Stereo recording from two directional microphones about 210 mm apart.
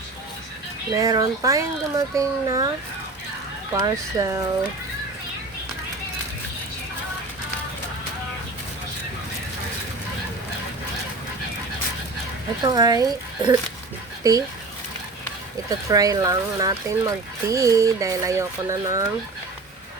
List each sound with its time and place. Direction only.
0.9 s speech: 15° right (ahead or behind)
3.8 s speech: 15° right (ahead or behind)
12.6 s speech: 20° right (ahead or behind)
15.7 s speech: 15° right (ahead or behind)